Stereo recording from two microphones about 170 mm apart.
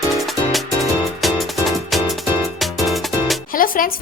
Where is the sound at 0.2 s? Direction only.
Centre (ahead or behind).